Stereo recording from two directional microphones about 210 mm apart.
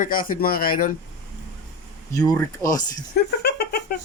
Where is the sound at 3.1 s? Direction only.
50° left (ahead or behind).